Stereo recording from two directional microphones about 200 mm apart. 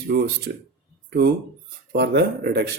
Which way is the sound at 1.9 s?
55° right (ahead or behind).